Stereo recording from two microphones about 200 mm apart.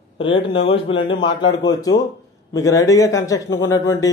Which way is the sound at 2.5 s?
15° left (ahead or behind).